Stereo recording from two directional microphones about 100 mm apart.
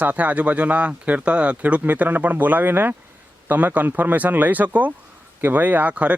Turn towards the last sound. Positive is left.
turn(degrees=-15)  # may be behind; listen again after turning